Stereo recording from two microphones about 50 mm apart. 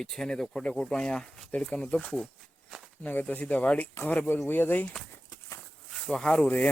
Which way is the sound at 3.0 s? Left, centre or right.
Left.